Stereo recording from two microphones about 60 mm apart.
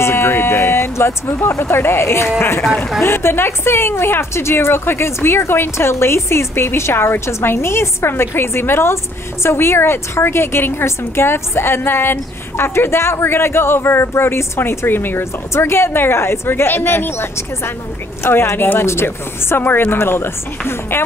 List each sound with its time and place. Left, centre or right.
0.0 s a woman's voice: left
15.5 s speech: left